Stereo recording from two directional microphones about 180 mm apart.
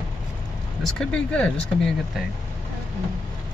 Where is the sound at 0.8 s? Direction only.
5° left (ahead or behind).